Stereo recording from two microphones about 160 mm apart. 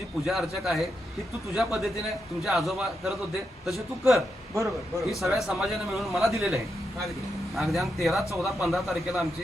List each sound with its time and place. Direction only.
0.3 s a man's voice: centre (ahead or behind)
4.5 s a man's voice: 20° right (ahead or behind)
5.0 s a man's voice: centre (ahead or behind)